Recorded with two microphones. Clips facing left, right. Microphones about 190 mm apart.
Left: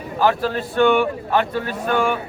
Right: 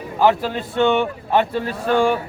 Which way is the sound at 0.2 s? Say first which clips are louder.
Right 2 dB; 20° right (ahead or behind).